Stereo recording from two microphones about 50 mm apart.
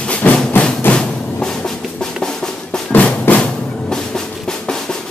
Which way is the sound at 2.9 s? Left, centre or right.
Left.